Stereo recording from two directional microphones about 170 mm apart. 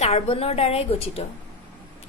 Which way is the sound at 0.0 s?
35° left (ahead or behind).